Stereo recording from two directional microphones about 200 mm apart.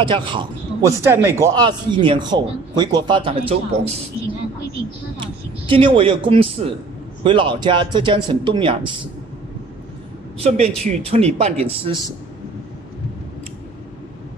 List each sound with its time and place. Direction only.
0.0 s a man's voice: 25° right (ahead or behind)
5.2 s a man's voice: 25° right (ahead or behind)
10.4 s a man's voice: 30° right (ahead or behind)